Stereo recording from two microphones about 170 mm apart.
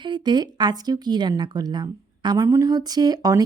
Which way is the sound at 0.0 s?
25° right (ahead or behind).